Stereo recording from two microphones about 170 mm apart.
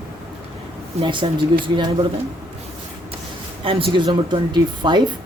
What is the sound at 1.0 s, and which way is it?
Speech, 30° right (ahead or behind).